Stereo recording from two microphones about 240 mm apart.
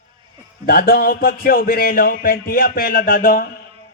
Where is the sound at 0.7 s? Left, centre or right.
Left.